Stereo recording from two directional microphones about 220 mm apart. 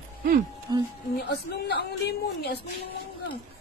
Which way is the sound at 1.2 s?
45° left (ahead or behind).